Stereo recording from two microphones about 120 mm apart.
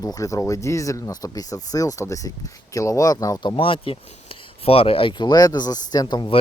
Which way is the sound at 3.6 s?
45° left (ahead or behind).